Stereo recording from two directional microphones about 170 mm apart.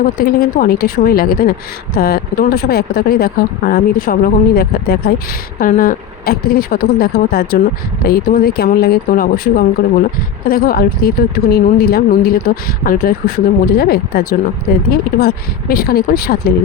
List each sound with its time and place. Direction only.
0.0 s speech: 60° left (ahead or behind)
5.5 s speech: 55° left (ahead or behind)